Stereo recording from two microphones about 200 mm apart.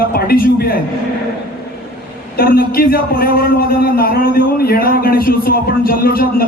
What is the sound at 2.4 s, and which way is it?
Speech, 45° left (ahead or behind).